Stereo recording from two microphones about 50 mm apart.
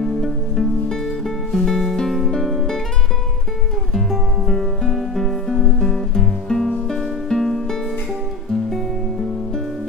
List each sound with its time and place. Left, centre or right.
0.0 s music: centre
3.9 s music: centre